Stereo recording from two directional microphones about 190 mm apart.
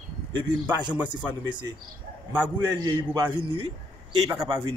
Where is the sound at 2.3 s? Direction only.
10° right (ahead or behind).